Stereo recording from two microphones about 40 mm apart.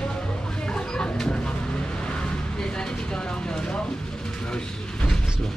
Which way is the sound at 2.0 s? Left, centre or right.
Left.